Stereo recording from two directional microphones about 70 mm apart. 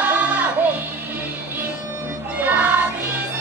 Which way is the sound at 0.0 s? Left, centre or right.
Right.